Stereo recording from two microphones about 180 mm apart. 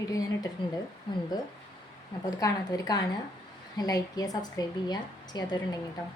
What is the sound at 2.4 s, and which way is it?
A woman's voice, 20° left (ahead or behind).